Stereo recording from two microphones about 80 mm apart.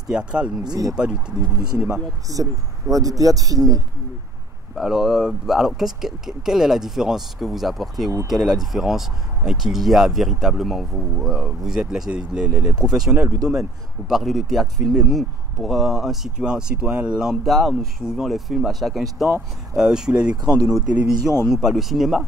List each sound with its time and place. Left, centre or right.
0.1 s speech: centre
0.7 s a man's voice: right
2.3 s a man's voice: right
4.7 s speech: centre